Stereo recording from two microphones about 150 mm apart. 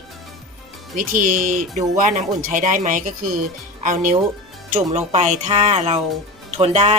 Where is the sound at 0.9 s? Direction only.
60° right (ahead or behind).